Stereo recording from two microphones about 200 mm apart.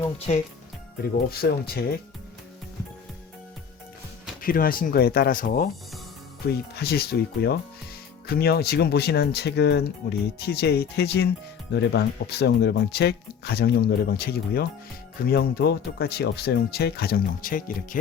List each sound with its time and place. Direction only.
0.3 s speech: 35° left (ahead or behind)
1.3 s speech: 50° left (ahead or behind)
4.4 s speech: 45° left (ahead or behind)
6.7 s speech: 50° left (ahead or behind)